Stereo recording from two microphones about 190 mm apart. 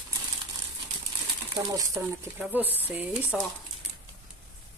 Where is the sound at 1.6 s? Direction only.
20° right (ahead or behind).